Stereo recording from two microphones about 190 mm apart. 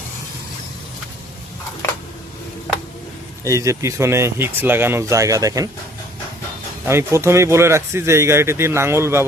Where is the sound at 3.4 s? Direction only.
15° right (ahead or behind).